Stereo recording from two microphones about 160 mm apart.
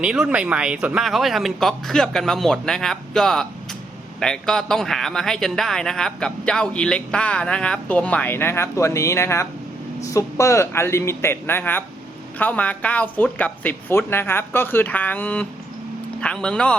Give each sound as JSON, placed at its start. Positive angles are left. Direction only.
{"t": 0.0, "sound": "a man's voice", "side_deg": -5}